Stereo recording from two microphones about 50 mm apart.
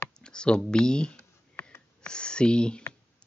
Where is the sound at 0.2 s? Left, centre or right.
Centre.